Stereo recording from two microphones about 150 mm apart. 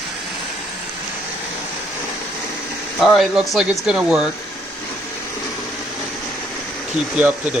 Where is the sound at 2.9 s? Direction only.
Centre (ahead or behind).